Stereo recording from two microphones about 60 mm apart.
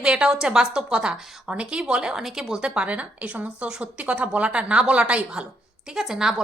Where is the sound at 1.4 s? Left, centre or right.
Centre.